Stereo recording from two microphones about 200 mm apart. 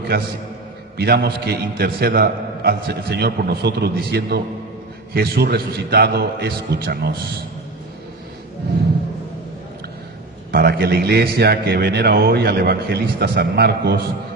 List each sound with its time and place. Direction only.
0.9 s a man's voice: 50° right (ahead or behind)
10.5 s a man's voice: 50° right (ahead or behind)